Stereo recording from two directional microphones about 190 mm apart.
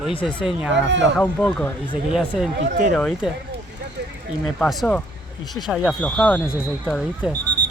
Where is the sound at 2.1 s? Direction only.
5° right (ahead or behind).